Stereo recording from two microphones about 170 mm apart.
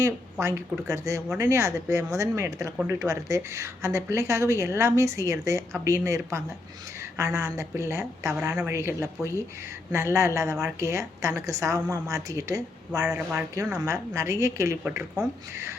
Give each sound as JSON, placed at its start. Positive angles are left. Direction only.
{"t": 0.0, "sound": "a woman's voice", "side_deg": -15}
{"t": 13.1, "sound": "speech", "side_deg": -5}
{"t": 14.8, "sound": "speech", "side_deg": -5}